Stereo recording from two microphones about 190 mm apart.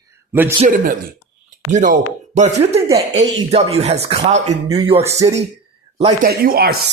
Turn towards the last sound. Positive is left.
turn(degrees=-55)  # may be behind; listen again after turning